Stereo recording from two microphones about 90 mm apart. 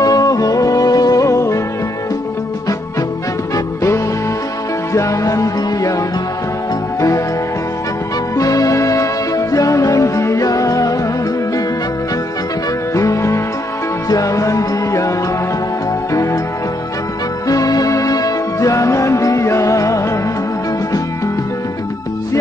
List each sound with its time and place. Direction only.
0.0 s music: 40° left (ahead or behind)
3.5 s music: 35° left (ahead or behind)
8.4 s music: 40° left (ahead or behind)
12.9 s music: 35° left (ahead or behind)
17.5 s music: 40° left (ahead or behind)